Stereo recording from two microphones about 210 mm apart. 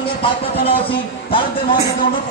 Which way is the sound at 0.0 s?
25° left (ahead or behind).